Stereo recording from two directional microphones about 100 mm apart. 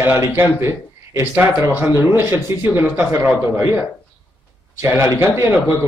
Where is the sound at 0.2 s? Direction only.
30° right (ahead or behind).